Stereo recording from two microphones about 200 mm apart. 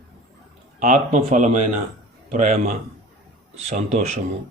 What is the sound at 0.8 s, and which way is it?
Speech, 35° right (ahead or behind).